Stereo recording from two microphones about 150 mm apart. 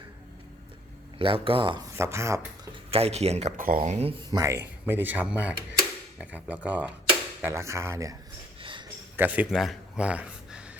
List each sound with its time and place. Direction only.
1.2 s speech: 35° right (ahead or behind)
2.0 s speech: 20° right (ahead or behind)
2.9 s speech: 45° right (ahead or behind)
3.6 s speech: 65° right (ahead or behind)
4.3 s speech: 20° right (ahead or behind)
9.1 s speech: 10° right (ahead or behind)
9.5 s speech: centre (ahead or behind)